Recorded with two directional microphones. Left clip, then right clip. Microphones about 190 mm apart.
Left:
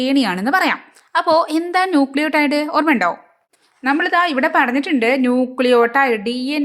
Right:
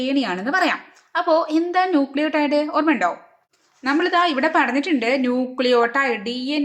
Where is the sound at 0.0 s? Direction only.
40° left (ahead or behind).